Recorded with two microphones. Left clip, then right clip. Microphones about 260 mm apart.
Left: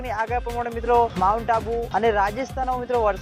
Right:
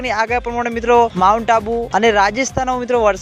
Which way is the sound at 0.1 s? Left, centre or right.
Right.